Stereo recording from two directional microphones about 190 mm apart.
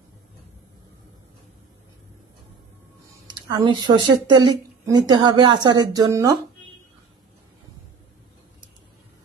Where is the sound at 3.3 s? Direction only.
20° right (ahead or behind).